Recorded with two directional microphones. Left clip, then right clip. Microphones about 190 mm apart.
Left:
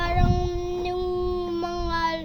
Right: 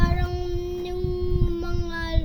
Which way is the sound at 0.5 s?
25° left (ahead or behind).